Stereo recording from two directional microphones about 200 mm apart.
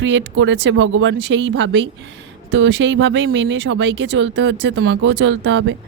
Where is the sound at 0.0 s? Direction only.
70° right (ahead or behind).